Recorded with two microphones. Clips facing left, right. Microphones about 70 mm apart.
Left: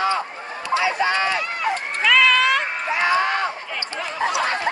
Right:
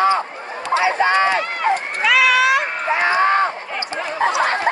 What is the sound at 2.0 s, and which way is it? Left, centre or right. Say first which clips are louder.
Run: right 1 dB; centre.